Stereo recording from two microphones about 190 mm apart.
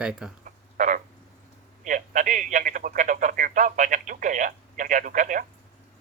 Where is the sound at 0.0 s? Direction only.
5° right (ahead or behind).